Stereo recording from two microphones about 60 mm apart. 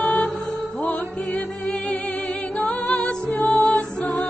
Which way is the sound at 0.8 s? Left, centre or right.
Centre.